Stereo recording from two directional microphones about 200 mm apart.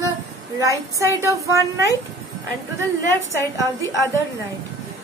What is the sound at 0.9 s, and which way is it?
Speech, 15° right (ahead or behind).